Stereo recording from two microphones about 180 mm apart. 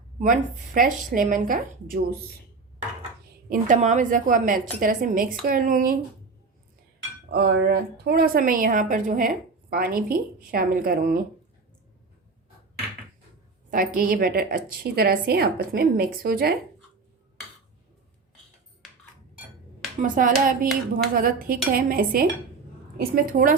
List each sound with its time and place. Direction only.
0.2 s a woman's voice: 50° right (ahead or behind)
3.5 s a woman's voice: 45° right (ahead or behind)
7.3 s a woman's voice: 65° right (ahead or behind); by 11.2 s 50° right (ahead or behind)
13.7 s a woman's voice: 50° right (ahead or behind)
20.0 s a woman's voice: 45° right (ahead or behind)